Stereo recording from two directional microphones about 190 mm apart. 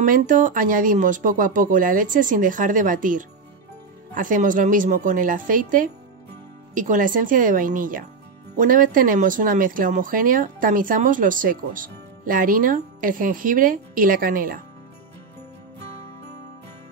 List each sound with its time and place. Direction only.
0.0 s speech: 45° right (ahead or behind)